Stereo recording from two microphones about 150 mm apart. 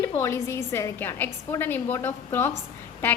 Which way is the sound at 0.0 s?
20° left (ahead or behind).